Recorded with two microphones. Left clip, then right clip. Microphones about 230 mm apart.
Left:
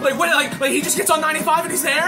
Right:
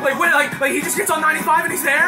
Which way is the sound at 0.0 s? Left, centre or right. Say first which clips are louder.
Right 1 dB; left.